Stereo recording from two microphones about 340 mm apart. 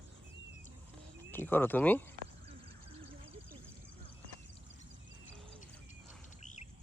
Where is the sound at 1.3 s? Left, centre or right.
Centre.